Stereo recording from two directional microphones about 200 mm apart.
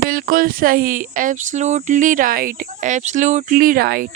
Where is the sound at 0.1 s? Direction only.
45° right (ahead or behind).